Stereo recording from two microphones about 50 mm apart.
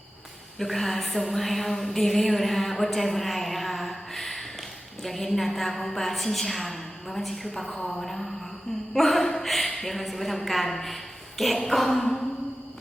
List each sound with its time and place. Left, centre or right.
0.6 s a woman's voice: centre
8.9 s a sound: centre
9.8 s a woman's voice: centre